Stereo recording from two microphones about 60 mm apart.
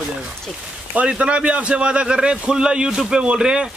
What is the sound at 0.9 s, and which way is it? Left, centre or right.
Speech, centre.